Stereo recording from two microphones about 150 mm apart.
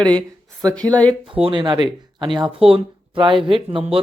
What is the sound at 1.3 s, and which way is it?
Speech, 35° right (ahead or behind).